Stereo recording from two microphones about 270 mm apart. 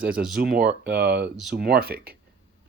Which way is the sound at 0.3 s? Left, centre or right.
Right.